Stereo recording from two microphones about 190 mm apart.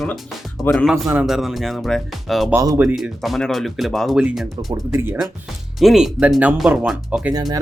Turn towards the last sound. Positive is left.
turn(degrees=-20)  # may be behind; listen again after turning